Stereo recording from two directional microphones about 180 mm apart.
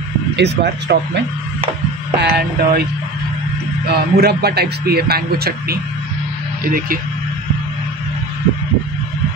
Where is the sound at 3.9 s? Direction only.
60° right (ahead or behind).